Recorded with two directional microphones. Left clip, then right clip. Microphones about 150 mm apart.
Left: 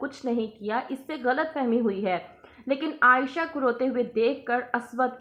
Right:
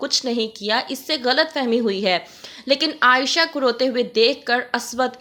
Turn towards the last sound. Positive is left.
turn(degrees=-35)  # may be behind; listen again after turning